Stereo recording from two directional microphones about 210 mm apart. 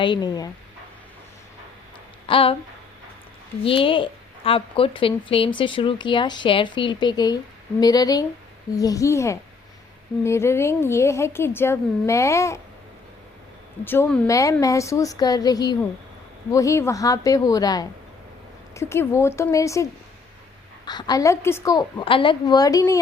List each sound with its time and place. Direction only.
0.0 s a woman's voice: 20° left (ahead or behind)
2.2 s speech: 25° left (ahead or behind)
3.6 s a woman's voice: 25° left (ahead or behind)
13.8 s a woman's voice: 10° left (ahead or behind)